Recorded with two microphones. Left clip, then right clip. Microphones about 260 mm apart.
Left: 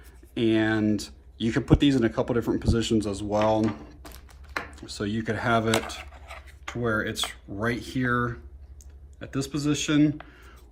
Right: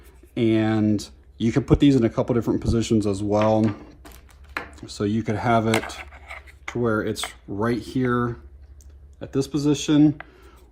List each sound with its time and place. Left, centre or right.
0.3 s speech: right
4.0 s typing: centre
4.7 s speech: right
6.0 s a sound: centre
6.8 s speech: centre